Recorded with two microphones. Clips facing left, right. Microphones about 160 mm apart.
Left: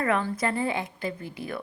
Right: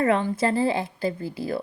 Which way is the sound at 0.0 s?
25° right (ahead or behind).